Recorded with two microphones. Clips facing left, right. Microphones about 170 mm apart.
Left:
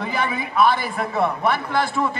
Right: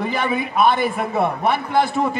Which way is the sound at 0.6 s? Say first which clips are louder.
Right 1 dB; 55° right (ahead or behind).